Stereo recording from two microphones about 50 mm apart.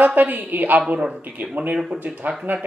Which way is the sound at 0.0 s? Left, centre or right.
Right.